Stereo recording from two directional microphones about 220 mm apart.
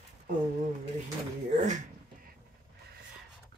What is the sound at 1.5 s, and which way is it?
Speech, 35° right (ahead or behind).